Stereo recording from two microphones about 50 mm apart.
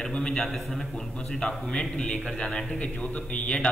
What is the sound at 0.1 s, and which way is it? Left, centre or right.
A man's voice, centre.